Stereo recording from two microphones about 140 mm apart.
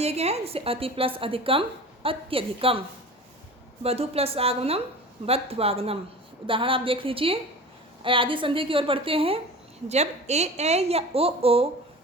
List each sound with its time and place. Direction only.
0.0 s a woman's voice: 50° right (ahead or behind)
3.8 s a woman's voice: 45° right (ahead or behind)
9.9 s a woman's voice: 50° right (ahead or behind)